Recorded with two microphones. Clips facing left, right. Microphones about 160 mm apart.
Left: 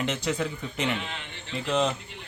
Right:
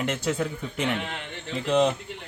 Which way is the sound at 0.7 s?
55° right (ahead or behind).